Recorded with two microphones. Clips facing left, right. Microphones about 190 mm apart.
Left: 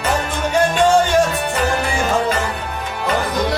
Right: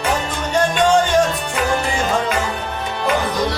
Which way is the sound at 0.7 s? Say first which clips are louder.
Even; 10° left (ahead or behind).